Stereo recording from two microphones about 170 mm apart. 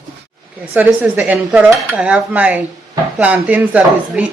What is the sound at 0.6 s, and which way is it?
Speech, 10° right (ahead or behind).